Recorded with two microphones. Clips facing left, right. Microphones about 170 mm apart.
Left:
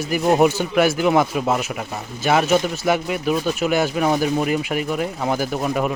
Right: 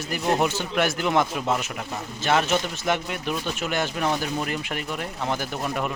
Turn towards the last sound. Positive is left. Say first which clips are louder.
# left 6 dB
turn(degrees=5)  # may be behind; listen again after turning